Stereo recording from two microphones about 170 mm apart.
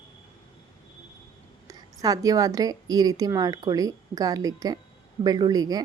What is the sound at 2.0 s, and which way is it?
A woman's voice, 20° right (ahead or behind).